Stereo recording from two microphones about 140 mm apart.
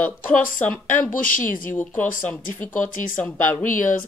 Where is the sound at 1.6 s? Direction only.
15° left (ahead or behind).